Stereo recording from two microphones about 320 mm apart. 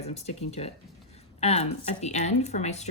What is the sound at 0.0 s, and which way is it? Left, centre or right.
A child's voice, centre.